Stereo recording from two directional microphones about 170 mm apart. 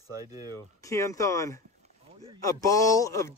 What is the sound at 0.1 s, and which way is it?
Speech, 20° right (ahead or behind).